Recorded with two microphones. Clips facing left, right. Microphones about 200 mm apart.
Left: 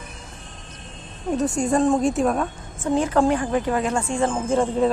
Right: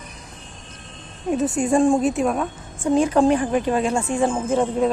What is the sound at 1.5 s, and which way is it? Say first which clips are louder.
A woman's voice: right 2 dB; 10° right (ahead or behind).